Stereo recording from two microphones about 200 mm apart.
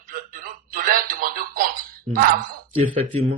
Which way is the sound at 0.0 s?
45° right (ahead or behind).